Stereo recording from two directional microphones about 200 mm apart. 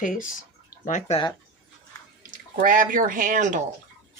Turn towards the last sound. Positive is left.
turn(degrees=-40)  # may be behind; listen again after turning